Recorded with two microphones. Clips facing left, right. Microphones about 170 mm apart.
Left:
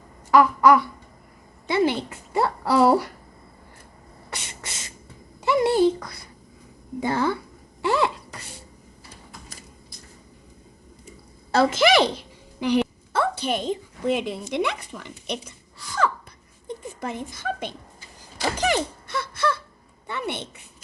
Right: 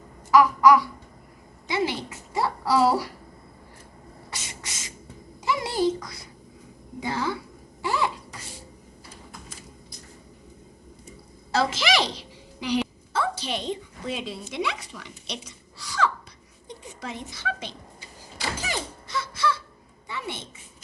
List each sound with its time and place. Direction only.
0.3 s babbling: 60° left (ahead or behind)
1.6 s a child's voice: 55° left (ahead or behind)
5.5 s a child's voice: 60° left (ahead or behind)
7.8 s a sound: 65° left (ahead or behind)
11.5 s a woman's voice: 55° left (ahead or behind)
18.5 s a sound: 65° left (ahead or behind)